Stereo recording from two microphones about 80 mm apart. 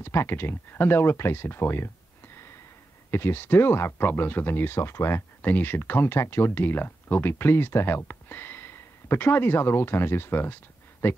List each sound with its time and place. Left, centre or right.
0.0 s speech: left